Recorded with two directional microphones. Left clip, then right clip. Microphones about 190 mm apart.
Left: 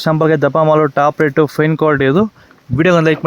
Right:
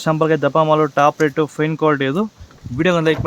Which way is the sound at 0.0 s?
30° left (ahead or behind).